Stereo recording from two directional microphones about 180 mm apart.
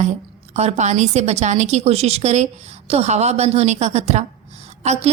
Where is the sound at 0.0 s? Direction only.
40° right (ahead or behind).